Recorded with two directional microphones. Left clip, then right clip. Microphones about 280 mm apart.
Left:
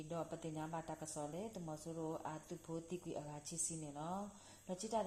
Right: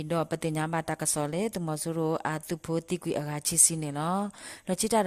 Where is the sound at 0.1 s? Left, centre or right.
Right.